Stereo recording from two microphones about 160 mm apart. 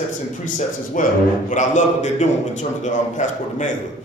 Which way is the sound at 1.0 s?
60° left (ahead or behind).